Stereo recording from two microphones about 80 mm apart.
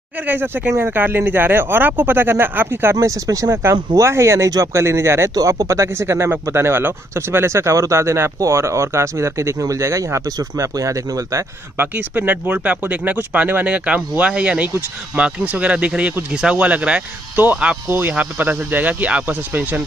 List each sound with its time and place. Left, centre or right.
0.7 s speech: right
3.3 s speech: right
4.0 s speech: right
5.3 s speech: right
11.8 s speech: right
17.8 s speech: right